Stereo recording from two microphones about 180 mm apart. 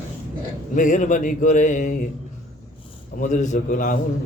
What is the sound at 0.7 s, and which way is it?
A man's voice, 45° left (ahead or behind).